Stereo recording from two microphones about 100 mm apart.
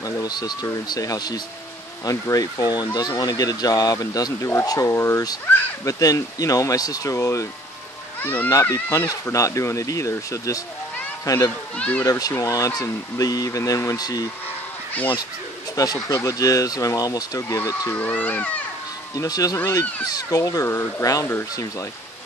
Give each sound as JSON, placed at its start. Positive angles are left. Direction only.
{"t": 0.0, "sound": "speech", "side_deg": 40}
{"t": 8.2, "sound": "speech", "side_deg": 20}
{"t": 8.5, "sound": "speech", "side_deg": 30}
{"t": 11.7, "sound": "speech", "side_deg": 15}
{"t": 12.0, "sound": "speech", "side_deg": 35}
{"t": 15.7, "sound": "speech", "side_deg": 35}
{"t": 17.9, "sound": "speech", "side_deg": 15}
{"t": 19.1, "sound": "speech", "side_deg": 35}
{"t": 20.6, "sound": "speech", "side_deg": 25}